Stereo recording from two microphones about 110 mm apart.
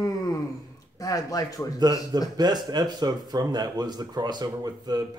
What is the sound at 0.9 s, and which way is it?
Speech, 35° left (ahead or behind).